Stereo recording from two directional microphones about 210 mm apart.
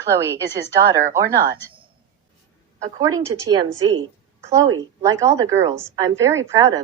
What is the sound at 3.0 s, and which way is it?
Speech, 15° right (ahead or behind).